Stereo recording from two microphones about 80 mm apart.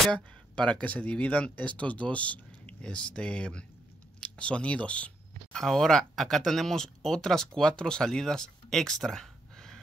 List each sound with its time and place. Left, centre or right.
0.1 s speech: centre
4.2 s a sound: centre
5.6 s speech: centre